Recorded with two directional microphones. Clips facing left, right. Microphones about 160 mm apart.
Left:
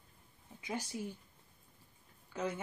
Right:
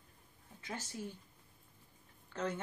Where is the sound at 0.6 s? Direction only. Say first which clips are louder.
Left 5 dB; 15° left (ahead or behind).